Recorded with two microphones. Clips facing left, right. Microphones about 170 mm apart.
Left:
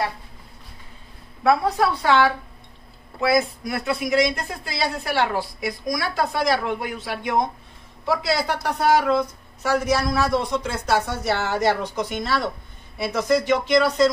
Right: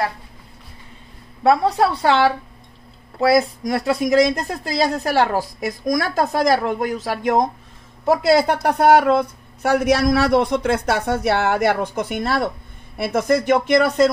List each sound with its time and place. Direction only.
1.4 s speech: 30° right (ahead or behind); by 14.1 s 55° right (ahead or behind)